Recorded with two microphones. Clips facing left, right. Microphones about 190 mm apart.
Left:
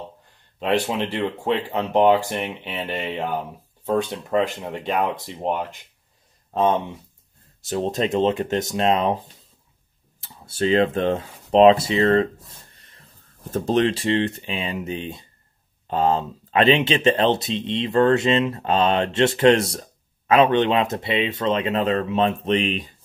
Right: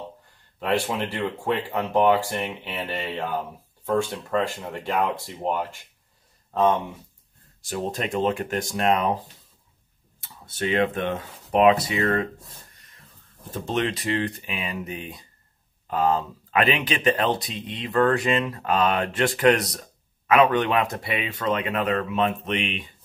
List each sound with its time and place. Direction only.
0.6 s speech: 20° left (ahead or behind)
12.7 s a sound: 30° left (ahead or behind)
13.4 s speech: 45° left (ahead or behind)